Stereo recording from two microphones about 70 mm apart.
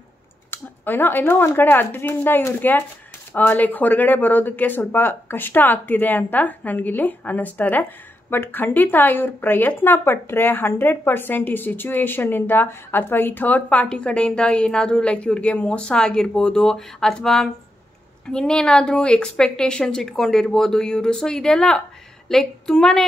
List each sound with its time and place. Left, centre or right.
0.5 s a woman's voice: left; by 23.0 s centre